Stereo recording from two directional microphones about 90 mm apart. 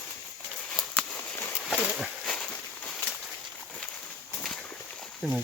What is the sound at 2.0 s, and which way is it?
Livestock, 5° left (ahead or behind).